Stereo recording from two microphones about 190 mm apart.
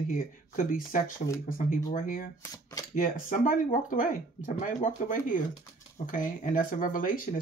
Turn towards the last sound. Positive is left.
turn(degrees=45)  # may be behind; listen again after turning